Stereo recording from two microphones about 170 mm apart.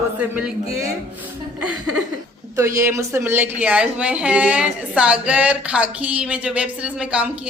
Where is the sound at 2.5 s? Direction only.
15° right (ahead or behind).